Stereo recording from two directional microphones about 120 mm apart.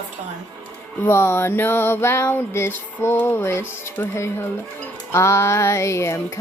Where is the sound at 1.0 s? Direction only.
20° left (ahead or behind).